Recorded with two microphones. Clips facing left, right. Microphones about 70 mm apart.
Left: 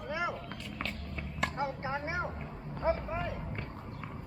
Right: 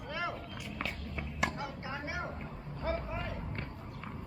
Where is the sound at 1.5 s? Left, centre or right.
Left.